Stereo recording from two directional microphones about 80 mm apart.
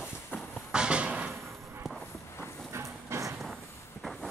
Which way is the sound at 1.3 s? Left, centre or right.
Centre.